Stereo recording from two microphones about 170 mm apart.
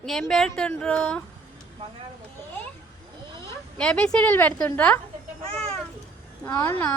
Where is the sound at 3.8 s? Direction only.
5° left (ahead or behind).